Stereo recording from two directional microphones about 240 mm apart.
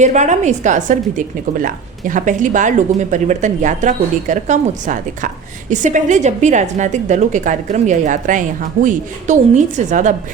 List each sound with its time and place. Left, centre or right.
0.0 s a woman's voice: right